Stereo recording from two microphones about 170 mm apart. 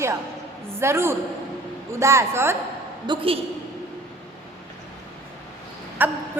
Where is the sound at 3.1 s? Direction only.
30° right (ahead or behind).